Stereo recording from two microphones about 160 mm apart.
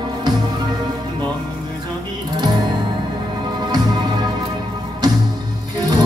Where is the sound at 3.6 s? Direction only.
25° right (ahead or behind).